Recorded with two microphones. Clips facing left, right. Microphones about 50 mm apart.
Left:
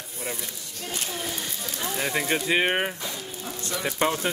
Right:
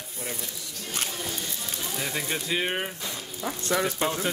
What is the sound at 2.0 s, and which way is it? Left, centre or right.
Speech, left.